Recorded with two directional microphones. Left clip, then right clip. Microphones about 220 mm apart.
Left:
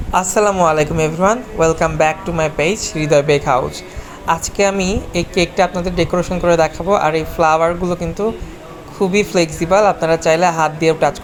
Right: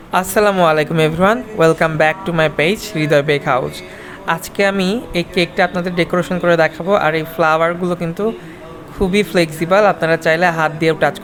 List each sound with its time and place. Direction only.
0.1 s speech: 15° right (ahead or behind)